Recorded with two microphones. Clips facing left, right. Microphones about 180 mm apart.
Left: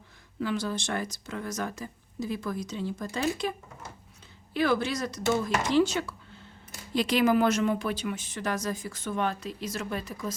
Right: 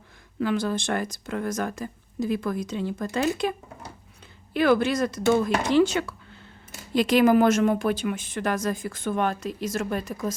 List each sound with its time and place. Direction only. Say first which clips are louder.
0.3 s speech: right 5 dB; 55° right (ahead or behind)
4.5 s speech: right 6 dB; 55° right (ahead or behind)
6.9 s a woman's voice: right 5 dB; 50° right (ahead or behind)